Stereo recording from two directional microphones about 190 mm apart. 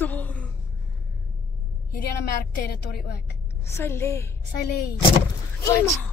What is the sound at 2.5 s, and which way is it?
Speech, 55° left (ahead or behind).